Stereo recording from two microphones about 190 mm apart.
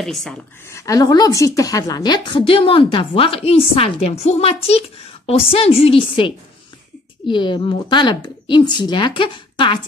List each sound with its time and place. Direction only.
0.0 s a woman's voice: centre (ahead or behind)
0.7 s a woman's voice: 15° left (ahead or behind)